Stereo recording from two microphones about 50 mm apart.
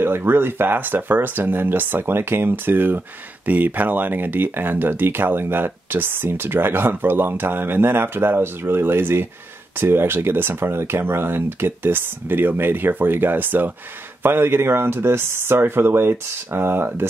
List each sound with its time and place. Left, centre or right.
0.0 s speech: right